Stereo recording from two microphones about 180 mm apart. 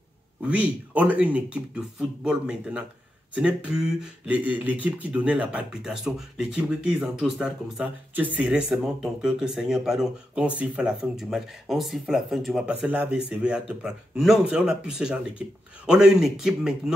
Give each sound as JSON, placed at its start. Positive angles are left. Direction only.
{"t": 0.4, "sound": "speech", "side_deg": -5}